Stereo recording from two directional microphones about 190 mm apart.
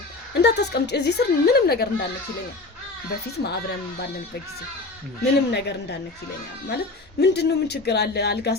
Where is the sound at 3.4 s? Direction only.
55° left (ahead or behind).